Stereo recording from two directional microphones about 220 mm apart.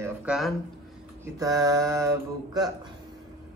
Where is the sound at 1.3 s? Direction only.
15° right (ahead or behind).